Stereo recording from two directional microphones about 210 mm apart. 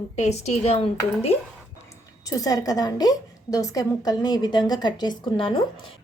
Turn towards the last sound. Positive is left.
turn(degrees=25)  # may be behind; listen again after turning